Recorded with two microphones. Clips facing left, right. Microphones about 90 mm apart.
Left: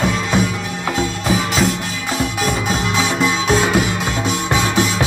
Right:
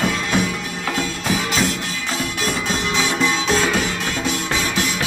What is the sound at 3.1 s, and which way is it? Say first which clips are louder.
Music: left 3 dB; 10° left (ahead or behind).